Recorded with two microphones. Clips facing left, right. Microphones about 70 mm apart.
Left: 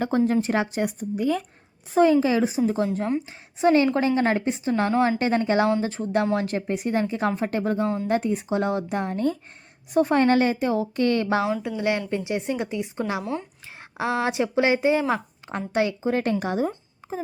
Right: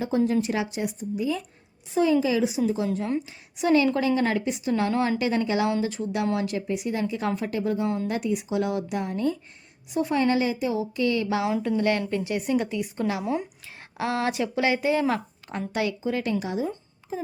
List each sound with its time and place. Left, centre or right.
0.1 s a woman's voice: left
11.8 s speech: centre; by 16.7 s left